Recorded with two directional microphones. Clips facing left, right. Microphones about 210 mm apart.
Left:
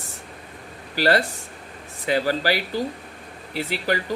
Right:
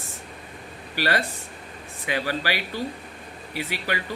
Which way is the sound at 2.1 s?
40° left (ahead or behind).